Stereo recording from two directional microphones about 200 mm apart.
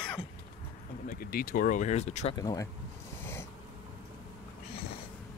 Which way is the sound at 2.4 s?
20° left (ahead or behind).